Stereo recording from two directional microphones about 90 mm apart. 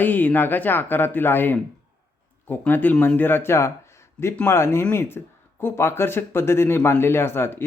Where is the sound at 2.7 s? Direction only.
20° left (ahead or behind).